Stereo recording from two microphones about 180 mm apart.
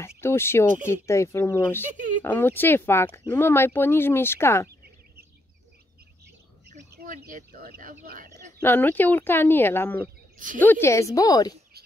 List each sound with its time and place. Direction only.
0.2 s speech: 15° left (ahead or behind)
1.9 s speech: 45° right (ahead or behind)
2.2 s speech: 10° left (ahead or behind)
7.0 s speech: 55° right (ahead or behind)
8.5 s speech: 10° left (ahead or behind)
10.3 s speech: 50° right (ahead or behind)
10.6 s speech: 10° left (ahead or behind)